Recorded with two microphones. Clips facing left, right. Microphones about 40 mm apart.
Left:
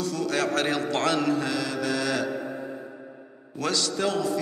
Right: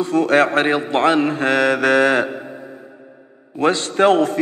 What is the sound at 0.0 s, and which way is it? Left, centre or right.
A man's voice, right.